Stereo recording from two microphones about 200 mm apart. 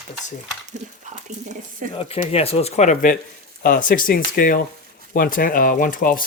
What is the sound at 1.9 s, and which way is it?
Speech, 30° left (ahead or behind).